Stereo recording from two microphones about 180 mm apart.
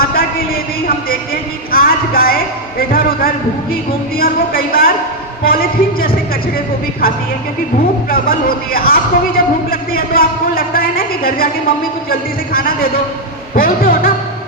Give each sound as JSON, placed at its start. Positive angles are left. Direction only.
{"t": 0.0, "sound": "a sound", "side_deg": 55}
{"t": 1.7, "sound": "a man's voice", "side_deg": 55}
{"t": 8.1, "sound": "a woman's voice", "side_deg": 55}
{"t": 12.5, "sound": "a man's voice", "side_deg": 55}